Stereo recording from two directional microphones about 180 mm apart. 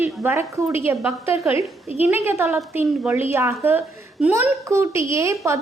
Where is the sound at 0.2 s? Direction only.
15° right (ahead or behind).